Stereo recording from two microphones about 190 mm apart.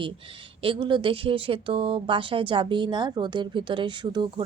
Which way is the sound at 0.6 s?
25° right (ahead or behind).